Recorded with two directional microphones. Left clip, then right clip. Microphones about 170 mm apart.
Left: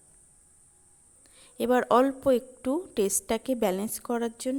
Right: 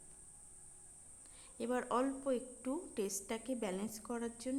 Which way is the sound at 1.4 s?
40° left (ahead or behind).